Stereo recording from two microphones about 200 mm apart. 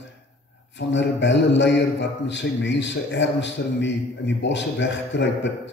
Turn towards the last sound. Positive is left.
turn(degrees=65)  # may be behind; listen again after turning